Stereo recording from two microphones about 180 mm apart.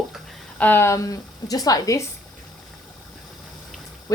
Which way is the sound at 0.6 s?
10° left (ahead or behind).